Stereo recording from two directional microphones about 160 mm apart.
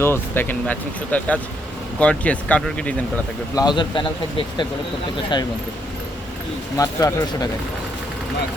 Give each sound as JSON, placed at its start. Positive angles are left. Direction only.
{"t": 0.0, "sound": "speech", "side_deg": 15}
{"t": 3.5, "sound": "speech", "side_deg": 25}
{"t": 6.7, "sound": "speech", "side_deg": 20}